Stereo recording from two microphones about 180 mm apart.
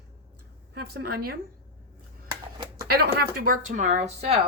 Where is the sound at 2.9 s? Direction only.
60° right (ahead or behind); by 4.3 s 35° right (ahead or behind).